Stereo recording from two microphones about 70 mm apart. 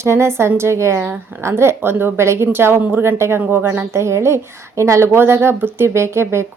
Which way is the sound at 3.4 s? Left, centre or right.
Right.